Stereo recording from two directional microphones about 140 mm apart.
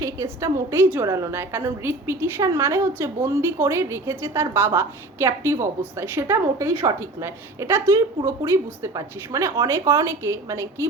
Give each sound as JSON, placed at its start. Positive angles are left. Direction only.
{"t": 0.0, "sound": "a woman's voice", "side_deg": -20}